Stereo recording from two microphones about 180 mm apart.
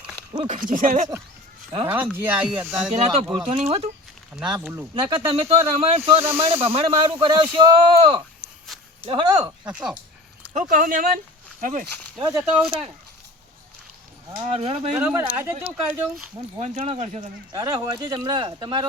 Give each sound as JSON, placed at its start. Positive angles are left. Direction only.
{"t": 0.3, "sound": "speech", "side_deg": -40}
{"t": 1.9, "sound": "speech", "side_deg": -10}
{"t": 2.9, "sound": "speech", "side_deg": -35}
{"t": 4.4, "sound": "speech", "side_deg": -5}
{"t": 4.9, "sound": "speech", "side_deg": -30}
{"t": 8.4, "sound": "a sound", "side_deg": -25}
{"t": 9.0, "sound": "speech", "side_deg": -25}
{"t": 9.4, "sound": "speech", "side_deg": -5}
{"t": 10.5, "sound": "speech", "side_deg": -45}
{"t": 14.4, "sound": "speech", "side_deg": -35}
{"t": 14.9, "sound": "speech", "side_deg": -10}
{"t": 16.6, "sound": "speech", "side_deg": -40}